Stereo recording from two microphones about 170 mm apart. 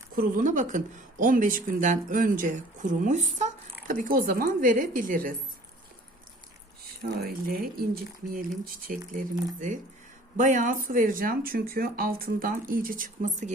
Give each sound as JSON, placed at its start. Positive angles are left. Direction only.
{"t": 0.2, "sound": "speech", "side_deg": -50}
{"t": 3.8, "sound": "speech", "side_deg": -55}
{"t": 7.2, "sound": "speech", "side_deg": -65}
{"t": 10.3, "sound": "speech", "side_deg": -45}